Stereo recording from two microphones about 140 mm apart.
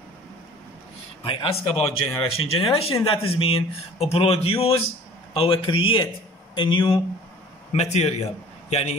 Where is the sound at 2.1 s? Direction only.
40° left (ahead or behind).